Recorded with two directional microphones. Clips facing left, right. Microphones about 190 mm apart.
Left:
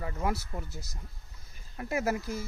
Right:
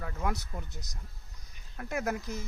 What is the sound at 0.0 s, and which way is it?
Speech, 5° left (ahead or behind).